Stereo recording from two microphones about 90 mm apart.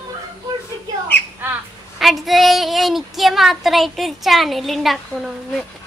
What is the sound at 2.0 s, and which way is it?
Speech, centre (ahead or behind).